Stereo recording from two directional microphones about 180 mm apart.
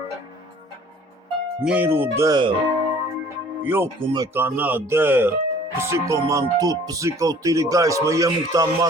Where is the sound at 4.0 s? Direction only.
25° right (ahead or behind).